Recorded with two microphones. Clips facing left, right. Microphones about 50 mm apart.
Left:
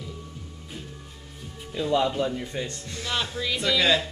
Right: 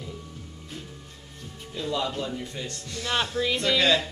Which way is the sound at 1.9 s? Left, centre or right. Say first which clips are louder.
Left 5 dB; centre.